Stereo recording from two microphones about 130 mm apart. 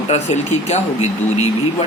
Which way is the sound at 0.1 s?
55° left (ahead or behind).